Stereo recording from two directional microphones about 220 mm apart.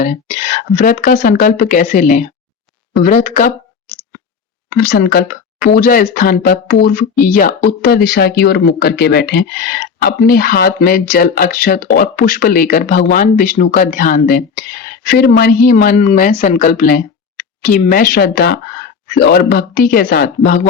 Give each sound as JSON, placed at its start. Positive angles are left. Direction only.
{"t": 0.8, "sound": "speech", "side_deg": 40}
{"t": 4.8, "sound": "speech", "side_deg": 40}